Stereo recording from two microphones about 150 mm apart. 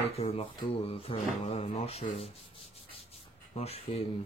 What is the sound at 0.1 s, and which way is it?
Speech, 40° left (ahead or behind).